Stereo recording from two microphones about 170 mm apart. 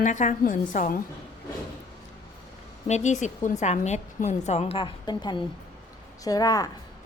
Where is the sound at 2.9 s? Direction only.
45° left (ahead or behind); by 6.6 s 20° left (ahead or behind).